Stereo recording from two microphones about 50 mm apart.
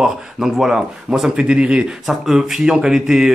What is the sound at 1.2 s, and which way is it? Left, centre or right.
Speech, centre.